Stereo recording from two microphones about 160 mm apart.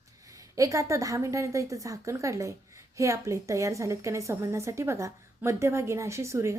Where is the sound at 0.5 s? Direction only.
20° right (ahead or behind).